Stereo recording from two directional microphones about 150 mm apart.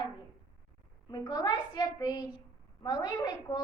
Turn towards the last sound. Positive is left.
turn(degrees=25)  # may be behind; listen again after turning